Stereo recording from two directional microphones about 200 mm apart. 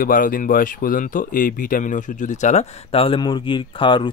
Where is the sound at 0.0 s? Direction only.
45° left (ahead or behind).